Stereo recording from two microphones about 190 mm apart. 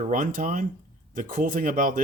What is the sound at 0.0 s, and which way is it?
Speech, 45° right (ahead or behind).